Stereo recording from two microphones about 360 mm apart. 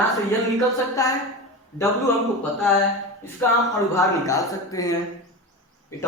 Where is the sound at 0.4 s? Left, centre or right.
Centre.